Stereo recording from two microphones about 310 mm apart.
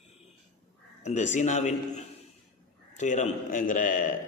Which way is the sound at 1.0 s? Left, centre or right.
Left.